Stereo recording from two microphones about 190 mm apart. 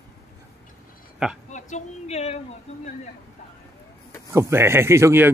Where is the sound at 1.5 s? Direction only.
35° left (ahead or behind).